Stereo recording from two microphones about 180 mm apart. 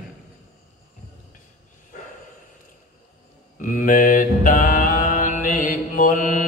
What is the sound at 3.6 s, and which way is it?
Mantra, 45° left (ahead or behind).